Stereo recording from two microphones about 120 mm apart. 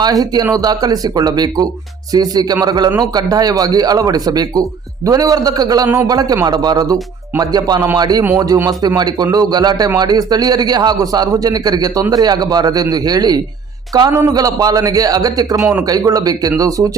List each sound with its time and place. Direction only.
0.0 s a man's voice: 35° right (ahead or behind)